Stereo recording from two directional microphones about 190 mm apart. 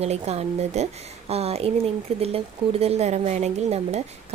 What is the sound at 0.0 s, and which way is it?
Speech, 35° right (ahead or behind).